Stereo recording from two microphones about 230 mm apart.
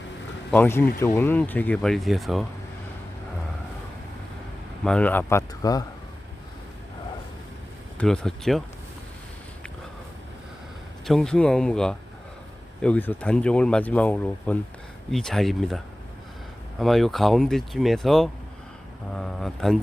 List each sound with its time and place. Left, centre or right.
0.5 s speech: centre
4.8 s speech: centre
7.9 s speech: centre
11.0 s speech: centre